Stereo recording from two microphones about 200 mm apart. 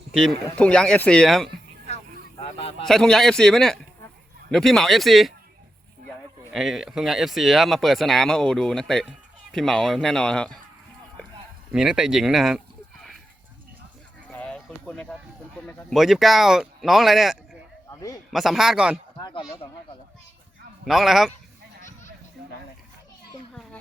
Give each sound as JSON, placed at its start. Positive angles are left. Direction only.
{"t": 0.1, "sound": "speech", "side_deg": 0}
{"t": 2.4, "sound": "a man's voice", "side_deg": 30}
{"t": 2.8, "sound": "speech", "side_deg": 0}
{"t": 6.5, "sound": "speech", "side_deg": 0}
{"t": 11.7, "sound": "speech", "side_deg": -5}
{"t": 14.3, "sound": "a sound", "side_deg": 5}
{"t": 15.6, "sound": "speech", "side_deg": 5}
{"t": 17.9, "sound": "a sound", "side_deg": 20}
{"t": 18.3, "sound": "speech", "side_deg": 0}
{"t": 19.1, "sound": "speech", "side_deg": 25}
{"t": 20.8, "sound": "speech", "side_deg": 0}